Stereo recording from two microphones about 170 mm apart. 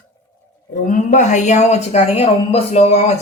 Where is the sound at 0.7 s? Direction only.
50° left (ahead or behind).